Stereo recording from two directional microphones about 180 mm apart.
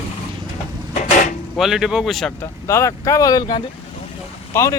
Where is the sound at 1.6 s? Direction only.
Centre (ahead or behind).